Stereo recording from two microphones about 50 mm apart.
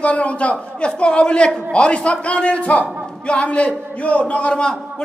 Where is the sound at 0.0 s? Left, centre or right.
Left.